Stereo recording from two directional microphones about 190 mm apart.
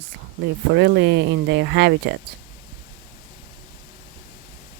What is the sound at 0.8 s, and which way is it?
Speech, 65° right (ahead or behind).